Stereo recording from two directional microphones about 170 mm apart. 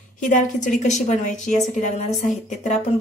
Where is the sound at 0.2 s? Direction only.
50° left (ahead or behind).